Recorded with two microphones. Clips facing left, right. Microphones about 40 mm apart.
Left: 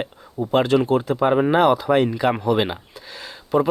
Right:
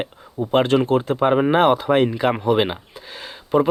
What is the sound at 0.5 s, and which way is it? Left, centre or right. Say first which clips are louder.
Speech: right 1 dB; right.